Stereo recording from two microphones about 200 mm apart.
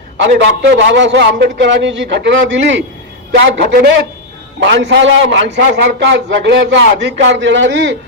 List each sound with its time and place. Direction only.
0.2 s a man's voice: 65° right (ahead or behind)